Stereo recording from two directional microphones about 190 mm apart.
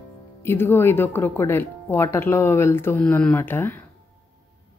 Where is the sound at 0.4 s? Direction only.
10° left (ahead or behind).